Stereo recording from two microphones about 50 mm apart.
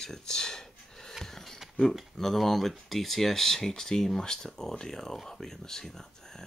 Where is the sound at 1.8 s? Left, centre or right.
Centre.